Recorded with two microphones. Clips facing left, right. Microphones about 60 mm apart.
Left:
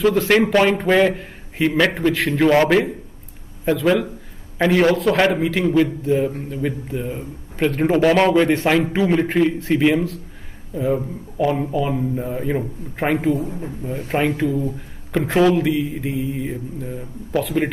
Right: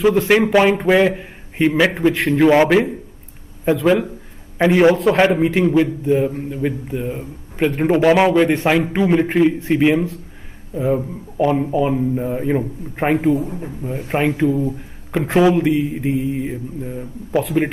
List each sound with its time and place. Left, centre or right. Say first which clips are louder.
0.0 s a man's voice: right 2 dB; centre
4.6 s a man's voice: right 3 dB; centre
5.8 s a man's voice: right 2 dB; centre
11.7 s speech: right 4 dB; right
12.0 s a man's voice: right 3 dB; centre